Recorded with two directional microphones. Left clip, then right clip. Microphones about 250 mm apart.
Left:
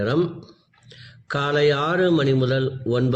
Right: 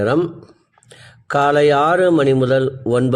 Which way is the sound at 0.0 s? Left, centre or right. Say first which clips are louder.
Right 5 dB; right.